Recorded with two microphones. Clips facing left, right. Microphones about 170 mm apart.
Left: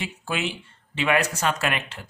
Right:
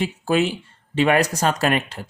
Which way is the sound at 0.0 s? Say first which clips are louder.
Right 9 dB; 40° right (ahead or behind).